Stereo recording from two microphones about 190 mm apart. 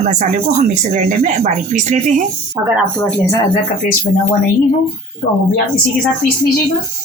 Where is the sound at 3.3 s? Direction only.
20° left (ahead or behind).